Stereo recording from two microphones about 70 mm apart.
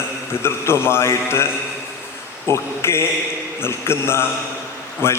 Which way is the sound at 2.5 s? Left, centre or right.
Left.